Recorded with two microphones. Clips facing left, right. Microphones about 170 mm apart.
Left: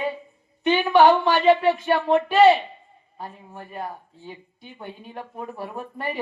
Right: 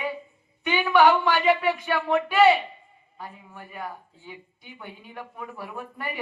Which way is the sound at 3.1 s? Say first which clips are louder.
Left 4 dB; 35° left (ahead or behind).